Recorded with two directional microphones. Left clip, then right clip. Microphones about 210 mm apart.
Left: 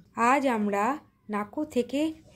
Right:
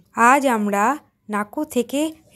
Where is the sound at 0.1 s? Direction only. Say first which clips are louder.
Right 9 dB; 25° right (ahead or behind).